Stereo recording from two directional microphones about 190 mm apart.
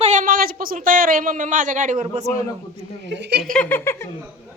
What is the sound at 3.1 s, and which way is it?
Speech, 65° right (ahead or behind).